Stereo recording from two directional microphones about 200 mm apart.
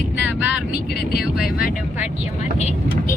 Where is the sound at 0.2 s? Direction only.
5° right (ahead or behind).